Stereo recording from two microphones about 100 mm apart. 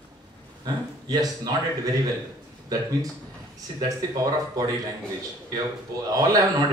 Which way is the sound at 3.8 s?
40° right (ahead or behind).